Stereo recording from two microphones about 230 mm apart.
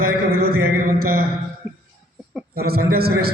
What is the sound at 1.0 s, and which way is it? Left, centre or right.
Speech, right.